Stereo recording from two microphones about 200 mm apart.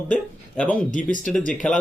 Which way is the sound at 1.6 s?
5° left (ahead or behind).